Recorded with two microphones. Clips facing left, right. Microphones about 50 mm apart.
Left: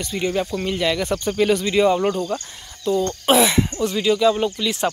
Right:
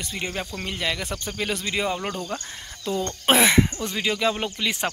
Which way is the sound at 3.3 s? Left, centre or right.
Right.